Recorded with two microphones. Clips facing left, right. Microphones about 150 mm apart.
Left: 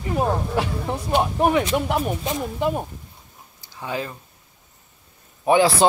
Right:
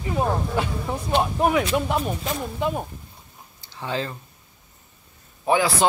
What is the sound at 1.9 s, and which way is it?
Speech, 15° left (ahead or behind).